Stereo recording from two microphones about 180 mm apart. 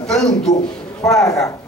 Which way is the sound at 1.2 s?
20° left (ahead or behind).